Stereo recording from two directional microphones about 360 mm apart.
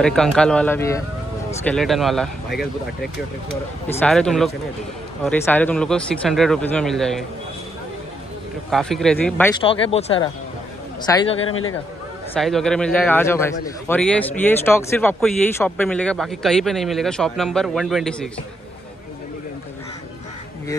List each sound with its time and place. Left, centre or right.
0.0 s a man's voice: centre
4.0 s a man's voice: centre
8.6 s a man's voice: centre
11.4 s a man's voice: left
12.4 s a man's voice: centre